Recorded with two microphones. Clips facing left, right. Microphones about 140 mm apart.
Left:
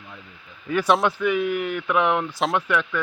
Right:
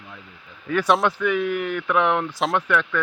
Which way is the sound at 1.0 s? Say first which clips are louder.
Even; 15° left (ahead or behind).